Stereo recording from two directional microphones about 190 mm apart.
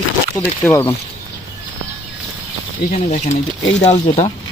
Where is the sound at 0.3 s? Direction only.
15° left (ahead or behind).